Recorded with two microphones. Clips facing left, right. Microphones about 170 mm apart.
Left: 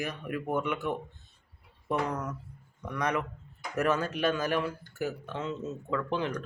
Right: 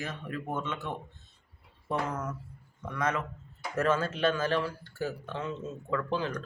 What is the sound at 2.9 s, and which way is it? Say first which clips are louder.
Speech: left 1 dB; 15° left (ahead or behind).